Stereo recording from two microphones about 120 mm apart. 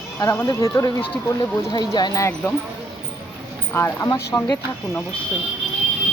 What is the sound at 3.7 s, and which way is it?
Speech, 20° left (ahead or behind).